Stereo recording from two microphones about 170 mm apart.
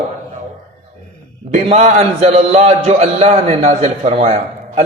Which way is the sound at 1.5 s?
40° right (ahead or behind).